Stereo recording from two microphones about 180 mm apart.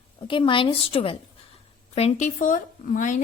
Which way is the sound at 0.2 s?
30° left (ahead or behind).